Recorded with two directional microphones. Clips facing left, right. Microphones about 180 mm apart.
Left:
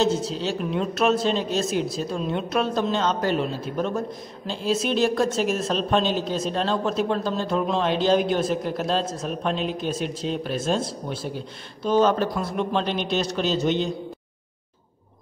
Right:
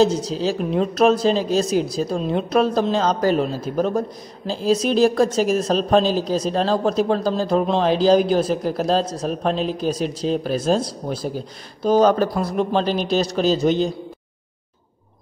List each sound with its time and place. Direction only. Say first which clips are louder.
0.0 s a woman's voice: right 5 dB; 35° right (ahead or behind)